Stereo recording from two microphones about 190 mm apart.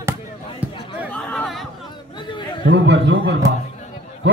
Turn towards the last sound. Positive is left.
turn(degrees=-65)  # may be behind; listen again after turning